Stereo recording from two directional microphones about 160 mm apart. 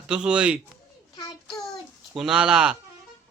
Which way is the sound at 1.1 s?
25° left (ahead or behind).